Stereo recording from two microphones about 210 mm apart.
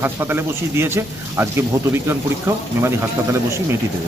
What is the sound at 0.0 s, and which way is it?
A man's voice, 10° right (ahead or behind).